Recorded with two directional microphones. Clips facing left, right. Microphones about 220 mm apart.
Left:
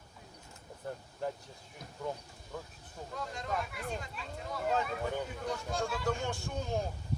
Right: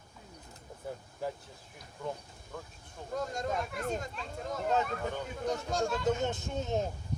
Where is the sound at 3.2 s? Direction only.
45° right (ahead or behind).